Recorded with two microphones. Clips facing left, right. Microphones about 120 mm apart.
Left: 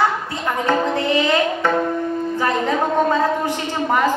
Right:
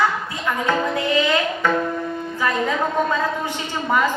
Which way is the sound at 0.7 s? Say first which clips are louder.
Left 3 dB; 35° left (ahead or behind).